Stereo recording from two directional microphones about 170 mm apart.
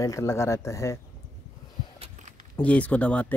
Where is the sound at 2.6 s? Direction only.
10° left (ahead or behind).